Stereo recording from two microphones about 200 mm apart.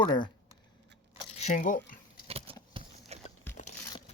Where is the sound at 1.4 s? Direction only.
35° left (ahead or behind).